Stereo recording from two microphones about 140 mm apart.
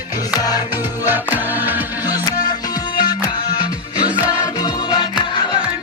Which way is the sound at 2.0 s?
30° left (ahead or behind).